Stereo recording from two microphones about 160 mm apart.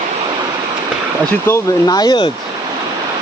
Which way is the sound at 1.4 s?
20° left (ahead or behind).